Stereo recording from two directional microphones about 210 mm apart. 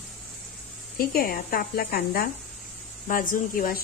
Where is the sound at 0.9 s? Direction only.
45° left (ahead or behind).